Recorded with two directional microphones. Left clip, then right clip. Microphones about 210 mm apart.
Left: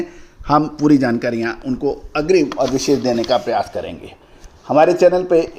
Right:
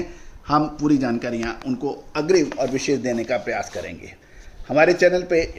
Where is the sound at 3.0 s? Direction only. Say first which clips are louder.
Left 7 dB; 60° left (ahead or behind).